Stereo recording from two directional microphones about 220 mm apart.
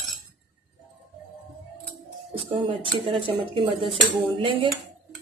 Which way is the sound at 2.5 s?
25° right (ahead or behind).